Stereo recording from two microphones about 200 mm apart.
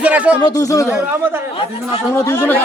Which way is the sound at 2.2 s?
15° left (ahead or behind).